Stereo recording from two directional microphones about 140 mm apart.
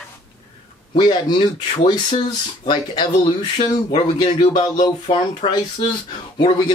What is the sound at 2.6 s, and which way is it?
Speech, 35° left (ahead or behind).